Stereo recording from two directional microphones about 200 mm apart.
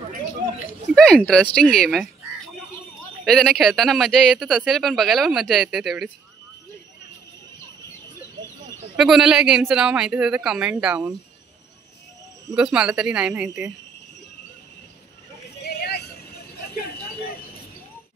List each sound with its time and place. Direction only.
0.9 s speech: 5° left (ahead or behind)
3.3 s speech: centre (ahead or behind)
8.9 s speech: 5° right (ahead or behind)
12.5 s speech: 5° right (ahead or behind)
15.6 s vehicle: 55° left (ahead or behind)